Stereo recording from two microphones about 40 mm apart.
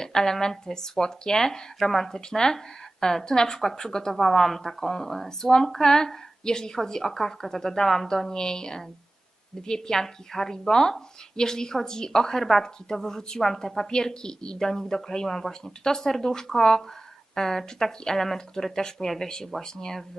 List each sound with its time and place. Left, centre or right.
0.0 s a woman's voice: centre